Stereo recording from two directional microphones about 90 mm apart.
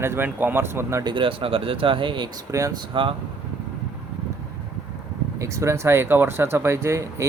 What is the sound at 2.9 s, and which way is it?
Speech, 65° right (ahead or behind).